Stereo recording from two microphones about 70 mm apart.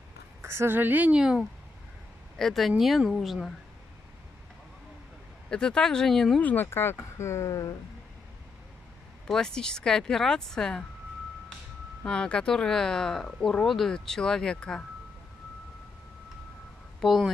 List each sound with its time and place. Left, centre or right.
0.4 s a woman's voice: right
1.1 s speech: centre
2.3 s a woman's voice: centre
5.5 s speech: centre
6.4 s speech: left
9.3 s speech: centre
12.0 s speech: centre
17.0 s a woman's voice: centre